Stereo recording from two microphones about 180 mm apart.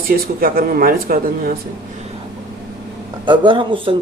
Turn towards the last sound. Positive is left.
turn(degrees=-30)  # may be behind; listen again after turning